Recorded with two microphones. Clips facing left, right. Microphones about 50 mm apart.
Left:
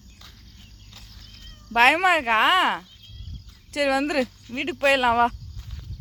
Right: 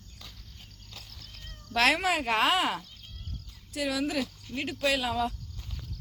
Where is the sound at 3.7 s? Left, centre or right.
Left.